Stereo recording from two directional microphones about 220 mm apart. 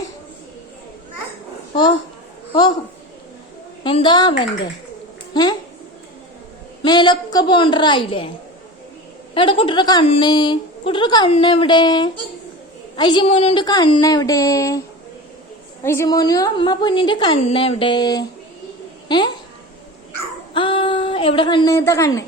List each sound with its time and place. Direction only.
2.5 s speech: 20° left (ahead or behind)
3.8 s a woman's voice: 20° left (ahead or behind)
6.8 s a woman's voice: 20° left (ahead or behind)
9.3 s a woman's voice: 25° left (ahead or behind)
15.8 s a woman's voice: 10° left (ahead or behind)
20.5 s a woman's voice: 25° left (ahead or behind)